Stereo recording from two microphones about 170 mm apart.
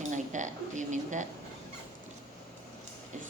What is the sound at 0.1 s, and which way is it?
Speech, 45° right (ahead or behind).